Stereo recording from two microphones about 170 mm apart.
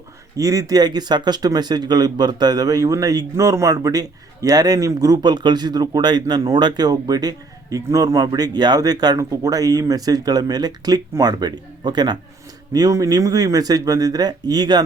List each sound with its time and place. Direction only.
0.3 s speech: 20° right (ahead or behind)